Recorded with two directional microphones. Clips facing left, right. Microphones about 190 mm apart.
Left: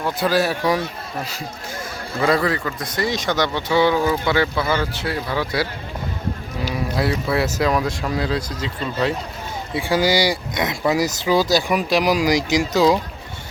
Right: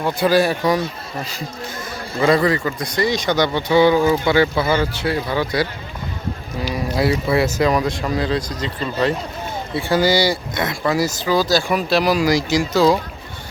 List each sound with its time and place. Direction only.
0.0 s speech: centre (ahead or behind)
2.2 s speech: 5° left (ahead or behind)
6.9 s speech: centre (ahead or behind); by 13.0 s 20° left (ahead or behind)